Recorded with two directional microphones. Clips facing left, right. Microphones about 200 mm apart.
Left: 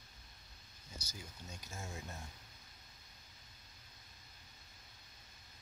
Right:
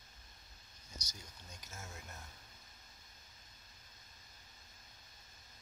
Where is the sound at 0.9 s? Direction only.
10° left (ahead or behind).